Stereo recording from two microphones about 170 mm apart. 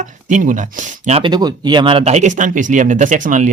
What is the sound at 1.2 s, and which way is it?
Speech, 25° right (ahead or behind).